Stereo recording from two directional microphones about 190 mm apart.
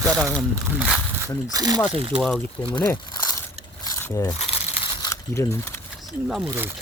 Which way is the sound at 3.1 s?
20° left (ahead or behind).